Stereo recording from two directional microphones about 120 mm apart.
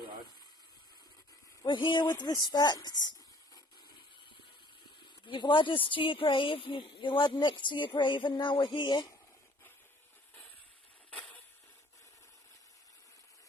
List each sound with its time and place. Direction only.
1.6 s speech: 40° left (ahead or behind)
5.2 s a woman's voice: 40° left (ahead or behind)